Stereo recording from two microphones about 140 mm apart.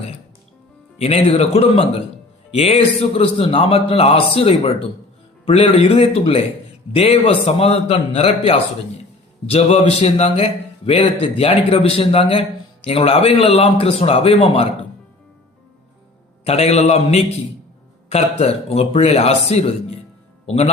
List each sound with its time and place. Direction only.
0.9 s a man's voice: 45° left (ahead or behind)
16.4 s a man's voice: 50° left (ahead or behind)